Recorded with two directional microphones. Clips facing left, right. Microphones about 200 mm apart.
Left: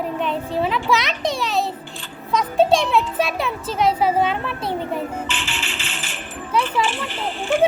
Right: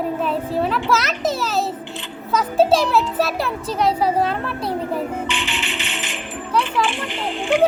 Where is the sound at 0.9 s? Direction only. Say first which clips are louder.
Right 1 dB; centre (ahead or behind).